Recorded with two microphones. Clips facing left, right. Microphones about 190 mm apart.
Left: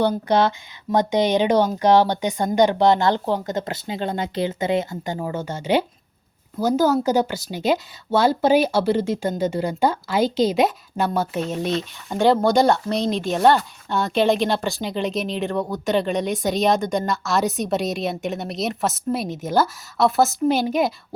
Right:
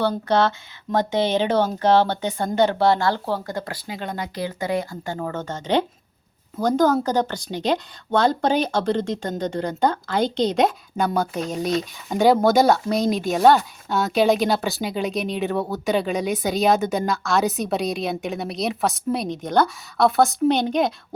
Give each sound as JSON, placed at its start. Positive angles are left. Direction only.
{"t": 0.0, "sound": "speech", "side_deg": 15}